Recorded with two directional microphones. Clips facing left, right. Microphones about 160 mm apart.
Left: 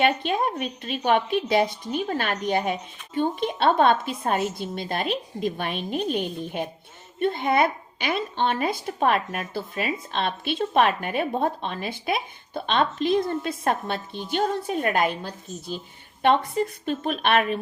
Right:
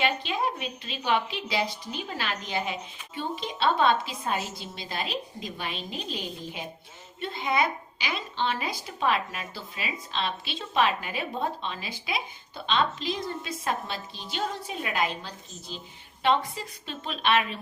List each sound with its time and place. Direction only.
0.0 s a woman's voice: 50° left (ahead or behind)